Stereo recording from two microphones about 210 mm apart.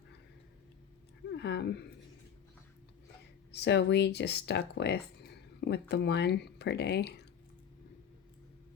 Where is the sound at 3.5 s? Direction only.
55° left (ahead or behind).